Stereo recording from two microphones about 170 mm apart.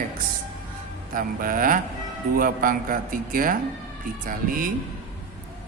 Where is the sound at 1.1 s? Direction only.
55° right (ahead or behind).